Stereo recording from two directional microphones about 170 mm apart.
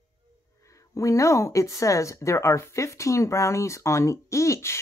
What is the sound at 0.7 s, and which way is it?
Speech, 20° left (ahead or behind).